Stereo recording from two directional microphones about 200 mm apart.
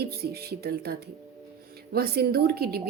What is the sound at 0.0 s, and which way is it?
A woman's voice, 50° right (ahead or behind).